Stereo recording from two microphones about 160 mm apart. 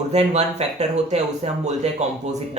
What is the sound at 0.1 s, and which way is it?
Speech, 45° right (ahead or behind).